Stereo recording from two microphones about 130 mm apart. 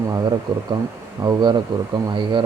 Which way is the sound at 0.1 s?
35° right (ahead or behind).